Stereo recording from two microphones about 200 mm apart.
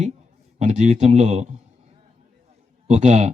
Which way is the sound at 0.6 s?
35° right (ahead or behind).